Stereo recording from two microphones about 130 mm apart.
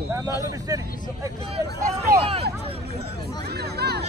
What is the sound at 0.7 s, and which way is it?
Speech, 25° right (ahead or behind).